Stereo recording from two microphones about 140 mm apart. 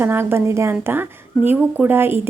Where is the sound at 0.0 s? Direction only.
15° right (ahead or behind).